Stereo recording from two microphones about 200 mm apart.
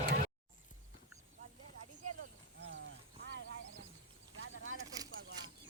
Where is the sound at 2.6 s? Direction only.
65° right (ahead or behind).